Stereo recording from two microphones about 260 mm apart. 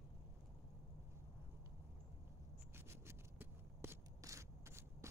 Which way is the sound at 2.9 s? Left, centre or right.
Centre.